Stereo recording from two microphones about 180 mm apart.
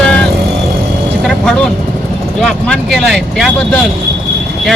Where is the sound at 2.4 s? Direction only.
Centre (ahead or behind).